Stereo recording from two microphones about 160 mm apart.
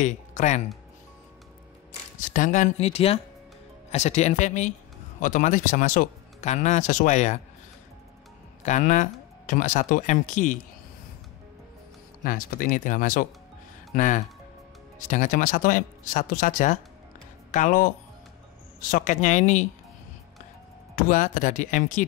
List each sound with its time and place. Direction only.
0.0 s speech: 50° left (ahead or behind)
2.3 s speech: 50° left (ahead or behind)
8.6 s speech: 50° left (ahead or behind)
12.2 s speech: 60° left (ahead or behind)
20.9 s speech: 55° left (ahead or behind)